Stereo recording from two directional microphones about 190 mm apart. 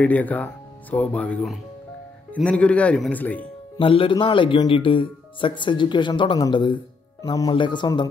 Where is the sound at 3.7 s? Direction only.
25° left (ahead or behind).